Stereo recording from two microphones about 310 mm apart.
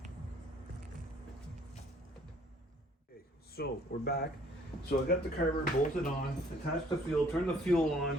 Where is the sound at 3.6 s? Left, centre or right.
Left.